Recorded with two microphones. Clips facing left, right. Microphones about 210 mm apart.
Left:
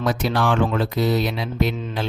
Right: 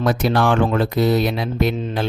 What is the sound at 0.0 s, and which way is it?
Speech, 55° right (ahead or behind).